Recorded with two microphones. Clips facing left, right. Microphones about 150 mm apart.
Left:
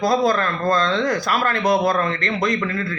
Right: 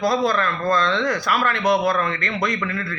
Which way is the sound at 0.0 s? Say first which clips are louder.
Left 2 dB; 40° left (ahead or behind).